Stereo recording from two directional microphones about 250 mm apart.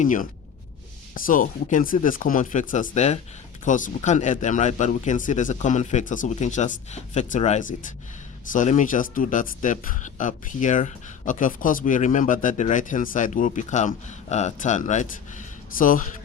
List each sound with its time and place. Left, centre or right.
0.0 s speech: left